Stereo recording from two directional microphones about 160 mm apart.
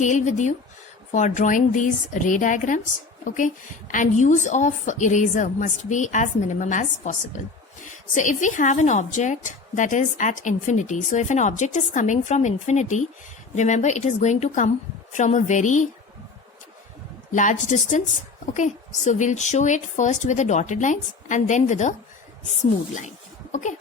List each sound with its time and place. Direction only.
0.0 s a woman's voice: 50° left (ahead or behind)
17.3 s a woman's voice: 50° left (ahead or behind)
23.0 s a sound: 50° left (ahead or behind)